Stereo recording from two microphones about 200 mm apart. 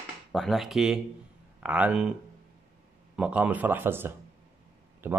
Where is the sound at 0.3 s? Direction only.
Centre (ahead or behind).